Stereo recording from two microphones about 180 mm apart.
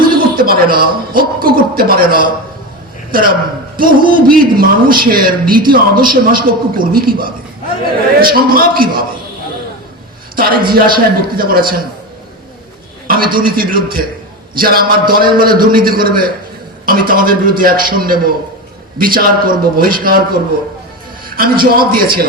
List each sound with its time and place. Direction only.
0.1 s a man's voice: 55° right (ahead or behind)
10.3 s a man's voice: 55° right (ahead or behind)
13.1 s a man's voice: 55° right (ahead or behind)